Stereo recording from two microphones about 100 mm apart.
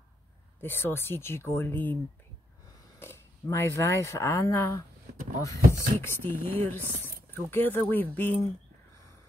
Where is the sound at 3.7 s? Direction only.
30° left (ahead or behind).